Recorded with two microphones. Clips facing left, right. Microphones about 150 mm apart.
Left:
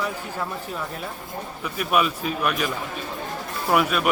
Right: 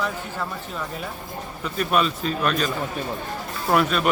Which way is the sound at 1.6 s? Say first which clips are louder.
Right 1 dB; 10° left (ahead or behind).